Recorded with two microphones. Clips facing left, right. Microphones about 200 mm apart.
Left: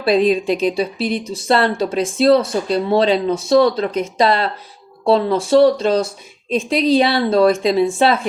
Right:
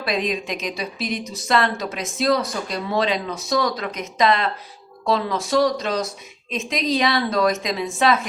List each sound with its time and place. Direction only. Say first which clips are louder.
0.0 s a woman's voice: left 9 dB; 30° left (ahead or behind)